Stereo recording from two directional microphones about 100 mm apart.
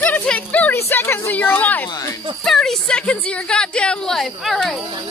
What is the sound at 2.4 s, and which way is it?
A woman's voice, 5° left (ahead or behind).